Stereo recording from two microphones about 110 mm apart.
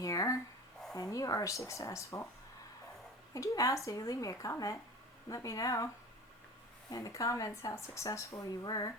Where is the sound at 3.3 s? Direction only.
30° left (ahead or behind).